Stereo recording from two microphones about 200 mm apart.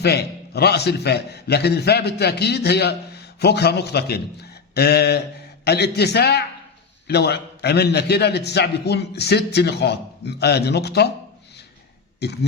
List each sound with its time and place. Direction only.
0.0 s a man's voice: 55° left (ahead or behind)
12.2 s a man's voice: 55° left (ahead or behind)